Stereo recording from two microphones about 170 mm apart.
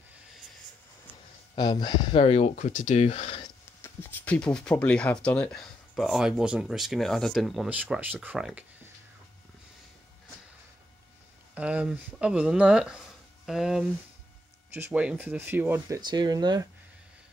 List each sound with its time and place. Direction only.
1.5 s speech: 25° left (ahead or behind)
3.8 s speech: 10° left (ahead or behind); by 8.6 s 5° right (ahead or behind)
11.5 s speech: 5° right (ahead or behind)
16.0 s speech: 25° right (ahead or behind)